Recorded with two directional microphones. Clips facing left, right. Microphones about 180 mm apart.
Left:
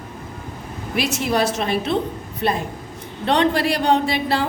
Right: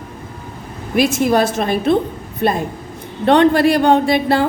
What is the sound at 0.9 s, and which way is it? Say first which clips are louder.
A woman's voice: right 7 dB; 45° right (ahead or behind).